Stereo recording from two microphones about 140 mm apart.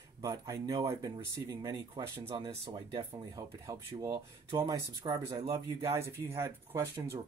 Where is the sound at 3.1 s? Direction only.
25° right (ahead or behind).